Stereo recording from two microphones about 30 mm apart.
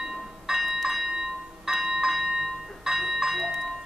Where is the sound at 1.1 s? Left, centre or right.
Centre.